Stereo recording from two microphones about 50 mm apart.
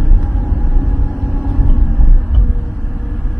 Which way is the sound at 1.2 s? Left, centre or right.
Left.